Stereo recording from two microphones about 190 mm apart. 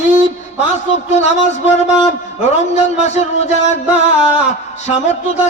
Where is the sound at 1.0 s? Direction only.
35° left (ahead or behind).